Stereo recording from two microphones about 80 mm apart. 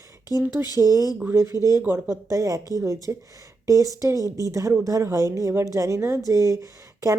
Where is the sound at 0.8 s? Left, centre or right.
Right.